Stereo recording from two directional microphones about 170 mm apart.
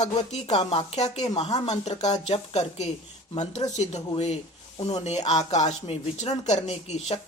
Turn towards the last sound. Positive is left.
turn(degrees=40)  # may be behind; listen again after turning